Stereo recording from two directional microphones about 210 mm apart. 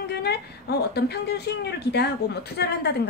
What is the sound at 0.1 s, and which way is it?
A woman's voice, 50° left (ahead or behind).